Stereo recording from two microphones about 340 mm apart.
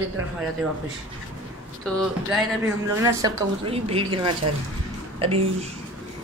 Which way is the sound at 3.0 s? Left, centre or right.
Centre.